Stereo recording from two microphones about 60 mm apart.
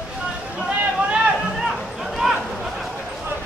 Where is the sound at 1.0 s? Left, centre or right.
Centre.